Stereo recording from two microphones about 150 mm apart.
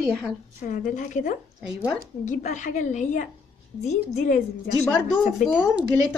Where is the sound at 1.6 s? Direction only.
5° right (ahead or behind).